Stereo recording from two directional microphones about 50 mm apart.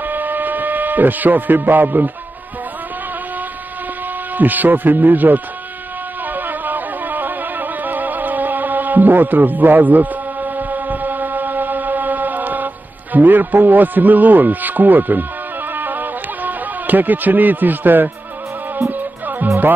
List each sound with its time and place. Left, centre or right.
0.0 s steam whistle: right
4.4 s speech: right
6.3 s music: right
13.1 s speech: right
15.7 s music: right